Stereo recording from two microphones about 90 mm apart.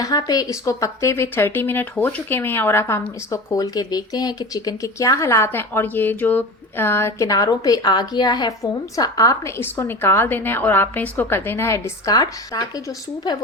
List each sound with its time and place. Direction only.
0.0 s speech: 45° left (ahead or behind); by 7.3 s 30° left (ahead or behind)
7.3 s a woman's voice: 40° left (ahead or behind)
8.6 s speech: 40° left (ahead or behind)
9.6 s a woman's voice: 25° left (ahead or behind); by 12.8 s 45° left (ahead or behind)